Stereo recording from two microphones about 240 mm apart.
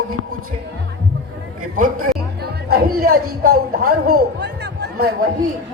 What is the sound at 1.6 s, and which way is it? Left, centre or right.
A man's voice, right.